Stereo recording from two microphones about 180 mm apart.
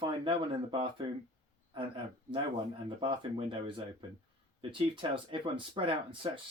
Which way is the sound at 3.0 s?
30° right (ahead or behind).